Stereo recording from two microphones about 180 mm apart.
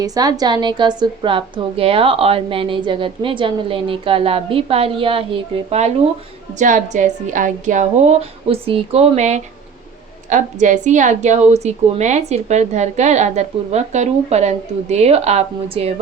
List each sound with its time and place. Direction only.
0.0 s a woman's voice: 20° right (ahead or behind)
6.6 s a woman's voice: 45° right (ahead or behind)